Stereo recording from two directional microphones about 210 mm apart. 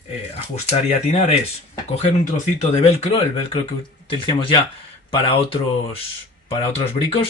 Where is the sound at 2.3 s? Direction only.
30° left (ahead or behind).